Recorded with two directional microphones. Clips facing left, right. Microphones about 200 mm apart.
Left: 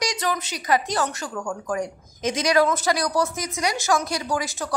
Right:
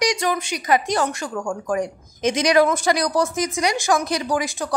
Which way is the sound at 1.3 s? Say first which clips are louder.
Right 2 dB; 30° right (ahead or behind).